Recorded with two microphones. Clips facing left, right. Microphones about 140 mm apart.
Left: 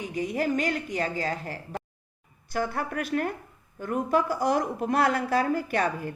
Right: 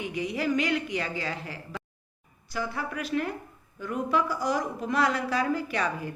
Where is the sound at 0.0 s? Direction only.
45° left (ahead or behind).